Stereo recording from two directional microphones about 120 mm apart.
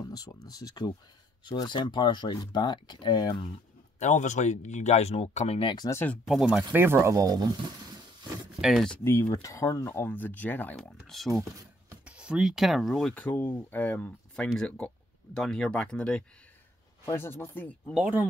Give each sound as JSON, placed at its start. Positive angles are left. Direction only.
{"t": 0.0, "sound": "speech", "side_deg": 30}
{"t": 4.0, "sound": "speech", "side_deg": 80}
{"t": 5.9, "sound": "speech", "side_deg": 20}
{"t": 6.2, "sound": "speech", "side_deg": -5}
{"t": 8.5, "sound": "speech", "side_deg": 0}
{"t": 9.0, "sound": "speech", "side_deg": 20}
{"t": 10.8, "sound": "speech", "side_deg": 0}
{"t": 12.0, "sound": "speech", "side_deg": -10}
{"t": 13.1, "sound": "speech", "side_deg": 15}
{"t": 17.0, "sound": "speech", "side_deg": 20}
{"t": 17.9, "sound": "speech", "side_deg": -10}